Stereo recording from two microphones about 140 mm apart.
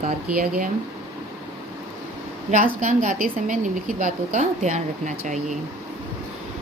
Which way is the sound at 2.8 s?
65° right (ahead or behind).